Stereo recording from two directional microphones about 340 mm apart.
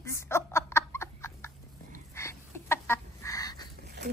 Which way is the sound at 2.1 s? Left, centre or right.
Centre.